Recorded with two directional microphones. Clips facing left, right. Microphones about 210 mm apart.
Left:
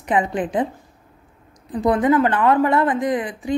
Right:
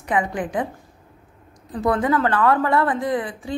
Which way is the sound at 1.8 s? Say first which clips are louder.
Left 3 dB; 20° left (ahead or behind).